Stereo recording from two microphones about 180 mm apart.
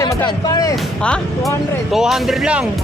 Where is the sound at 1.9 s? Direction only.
Centre (ahead or behind).